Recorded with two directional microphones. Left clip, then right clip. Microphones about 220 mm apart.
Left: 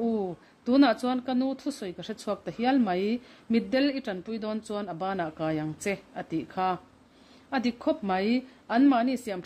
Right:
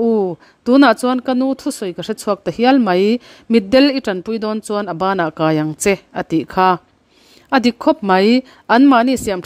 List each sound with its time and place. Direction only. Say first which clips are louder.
0.0 s speech: right 14 dB; 45° right (ahead or behind)